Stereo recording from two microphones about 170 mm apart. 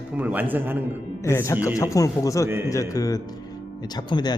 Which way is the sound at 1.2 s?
15° left (ahead or behind).